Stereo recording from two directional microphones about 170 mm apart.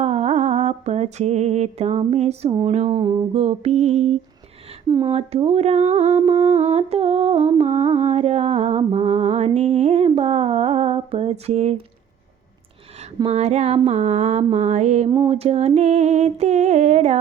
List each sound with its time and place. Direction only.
0.0 s music: 40° right (ahead or behind)
2.5 s speech: 25° right (ahead or behind)
2.7 s humming: 30° right (ahead or behind)
4.9 s speech: 25° right (ahead or behind)
5.1 s humming: 35° right (ahead or behind)
13.2 s humming: 40° right (ahead or behind)
15.1 s humming: 30° right (ahead or behind)